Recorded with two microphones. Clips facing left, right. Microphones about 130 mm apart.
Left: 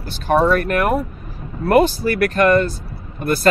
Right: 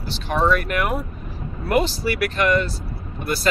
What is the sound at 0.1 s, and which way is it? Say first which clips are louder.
Speech: left 4 dB; 50° left (ahead or behind).